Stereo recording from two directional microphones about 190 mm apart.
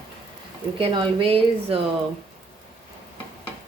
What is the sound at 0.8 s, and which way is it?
Speech, 30° right (ahead or behind).